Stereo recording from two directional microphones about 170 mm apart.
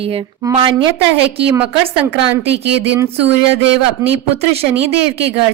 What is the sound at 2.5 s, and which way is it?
Speech, 90° right.